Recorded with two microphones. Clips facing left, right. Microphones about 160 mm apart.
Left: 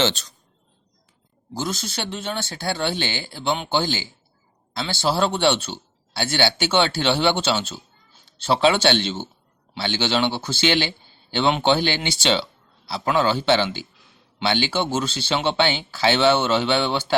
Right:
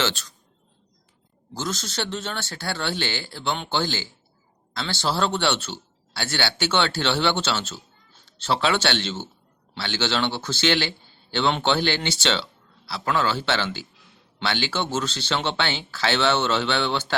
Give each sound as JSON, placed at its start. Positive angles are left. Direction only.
{"t": 0.0, "sound": "speech", "side_deg": 20}
{"t": 1.5, "sound": "a man's voice", "side_deg": 15}